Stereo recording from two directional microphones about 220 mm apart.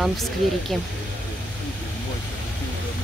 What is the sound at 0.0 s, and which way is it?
Speech, centre (ahead or behind).